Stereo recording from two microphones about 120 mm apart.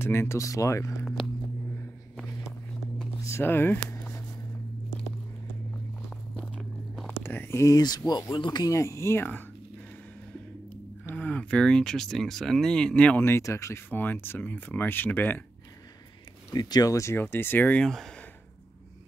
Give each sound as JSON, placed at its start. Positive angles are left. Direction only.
{"t": 0.0, "sound": "speech", "side_deg": 20}
{"t": 3.3, "sound": "speech", "side_deg": 20}
{"t": 3.9, "sound": "a sound", "side_deg": 25}
{"t": 6.3, "sound": "biting", "side_deg": 5}
{"t": 7.2, "sound": "speech", "side_deg": 20}
{"t": 11.1, "sound": "speech", "side_deg": 10}
{"t": 13.2, "sound": "speech", "side_deg": 20}
{"t": 16.5, "sound": "speech", "side_deg": 35}